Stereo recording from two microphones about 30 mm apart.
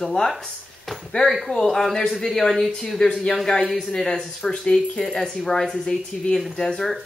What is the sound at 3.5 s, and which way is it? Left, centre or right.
Speech, left.